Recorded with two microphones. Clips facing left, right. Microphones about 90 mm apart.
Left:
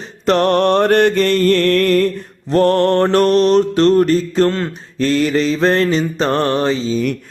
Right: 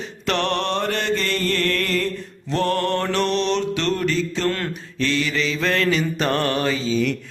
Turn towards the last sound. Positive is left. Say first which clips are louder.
# left 4 dB
turn(degrees=40)  # may be behind; listen again after turning